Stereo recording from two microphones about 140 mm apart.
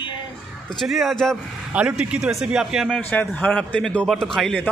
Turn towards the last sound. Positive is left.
turn(degrees=5)  # may be behind; listen again after turning